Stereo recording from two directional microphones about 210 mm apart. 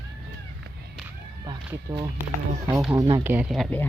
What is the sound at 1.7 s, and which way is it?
Speech, 10° right (ahead or behind).